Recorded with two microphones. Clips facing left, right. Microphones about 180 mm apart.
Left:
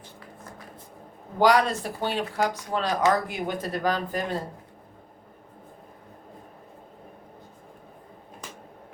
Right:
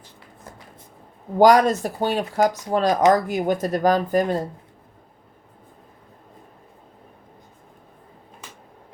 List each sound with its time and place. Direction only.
1.4 s speech: 45° right (ahead or behind)